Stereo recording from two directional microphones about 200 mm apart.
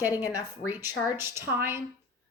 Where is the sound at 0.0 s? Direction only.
15° left (ahead or behind).